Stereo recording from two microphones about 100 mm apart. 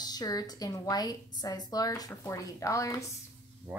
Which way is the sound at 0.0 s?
40° left (ahead or behind).